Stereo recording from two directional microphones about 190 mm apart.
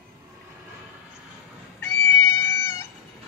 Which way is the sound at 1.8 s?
10° left (ahead or behind).